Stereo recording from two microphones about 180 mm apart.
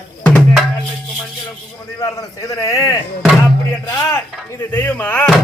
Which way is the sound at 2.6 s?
20° left (ahead or behind).